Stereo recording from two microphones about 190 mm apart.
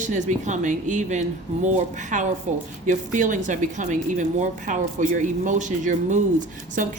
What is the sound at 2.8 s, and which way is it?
Speech, 40° right (ahead or behind).